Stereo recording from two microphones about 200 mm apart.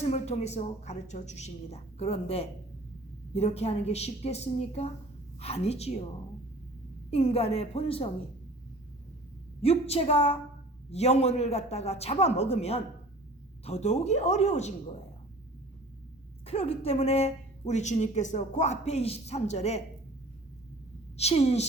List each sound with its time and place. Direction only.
0.0 s speech: 30° left (ahead or behind)
7.1 s a woman's voice: 30° left (ahead or behind)
9.6 s speech: 30° left (ahead or behind)
16.5 s speech: 30° left (ahead or behind)
21.2 s speech: 30° left (ahead or behind)